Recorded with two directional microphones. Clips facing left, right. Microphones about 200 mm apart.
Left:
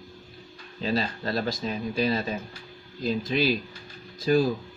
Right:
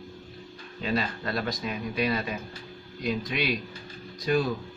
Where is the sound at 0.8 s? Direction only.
30° left (ahead or behind).